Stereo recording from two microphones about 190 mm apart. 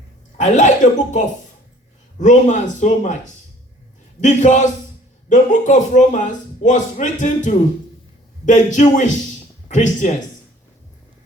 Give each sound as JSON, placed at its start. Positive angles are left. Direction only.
{"t": 0.3, "sound": "a man's voice", "side_deg": 40}
{"t": 4.2, "sound": "a man's voice", "side_deg": 40}